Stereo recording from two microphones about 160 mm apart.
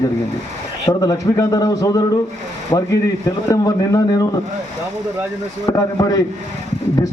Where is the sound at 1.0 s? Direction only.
20° left (ahead or behind).